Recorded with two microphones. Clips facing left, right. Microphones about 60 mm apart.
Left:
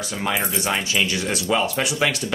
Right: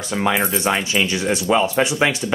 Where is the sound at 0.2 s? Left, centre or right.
Right.